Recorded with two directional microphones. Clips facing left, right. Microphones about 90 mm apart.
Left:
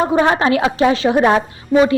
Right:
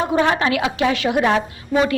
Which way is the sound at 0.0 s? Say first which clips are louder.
Left 3 dB; 35° left (ahead or behind).